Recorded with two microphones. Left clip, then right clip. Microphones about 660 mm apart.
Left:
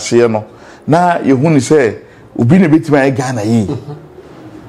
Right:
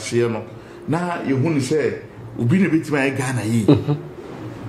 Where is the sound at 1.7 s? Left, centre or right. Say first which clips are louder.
Left 11 dB; left.